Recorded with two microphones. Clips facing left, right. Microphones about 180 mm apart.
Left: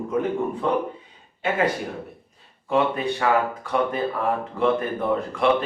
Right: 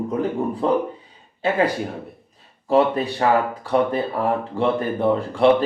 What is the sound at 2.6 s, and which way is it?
Speech, 35° right (ahead or behind).